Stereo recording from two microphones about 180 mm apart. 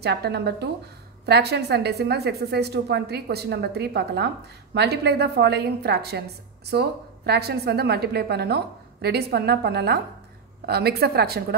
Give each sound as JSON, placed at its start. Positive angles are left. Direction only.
{"t": 0.0, "sound": "a woman's voice", "side_deg": -65}